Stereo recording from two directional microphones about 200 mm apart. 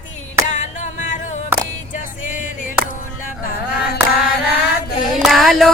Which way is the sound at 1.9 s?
40° left (ahead or behind).